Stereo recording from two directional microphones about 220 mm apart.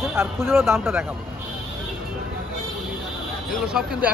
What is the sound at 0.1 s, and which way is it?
Speech, 10° right (ahead or behind).